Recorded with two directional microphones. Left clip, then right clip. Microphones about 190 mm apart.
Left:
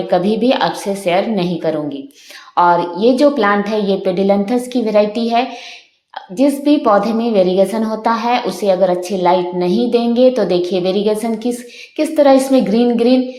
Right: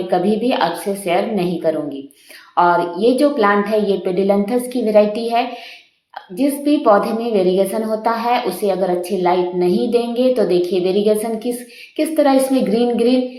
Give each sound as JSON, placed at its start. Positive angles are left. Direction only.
{"t": 0.1, "sound": "a woman's voice", "side_deg": 40}